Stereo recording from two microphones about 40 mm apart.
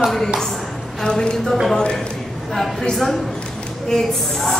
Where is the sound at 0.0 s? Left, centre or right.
Centre.